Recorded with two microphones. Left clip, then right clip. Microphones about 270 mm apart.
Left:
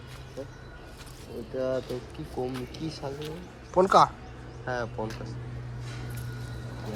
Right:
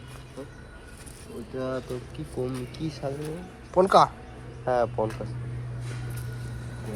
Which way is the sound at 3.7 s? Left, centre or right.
Centre.